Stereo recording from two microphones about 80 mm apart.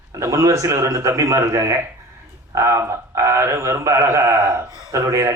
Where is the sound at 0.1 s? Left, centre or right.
Right.